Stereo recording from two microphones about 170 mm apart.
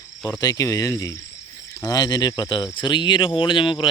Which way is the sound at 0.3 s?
20° left (ahead or behind).